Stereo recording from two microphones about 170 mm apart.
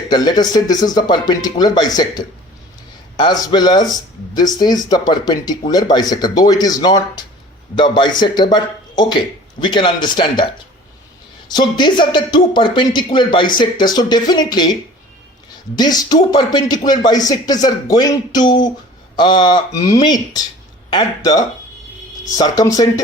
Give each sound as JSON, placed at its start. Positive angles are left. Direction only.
{"t": 0.1, "sound": "speech", "side_deg": 25}
{"t": 15.8, "sound": "speech", "side_deg": 25}